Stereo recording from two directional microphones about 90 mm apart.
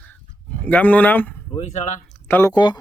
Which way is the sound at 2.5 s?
50° left (ahead or behind).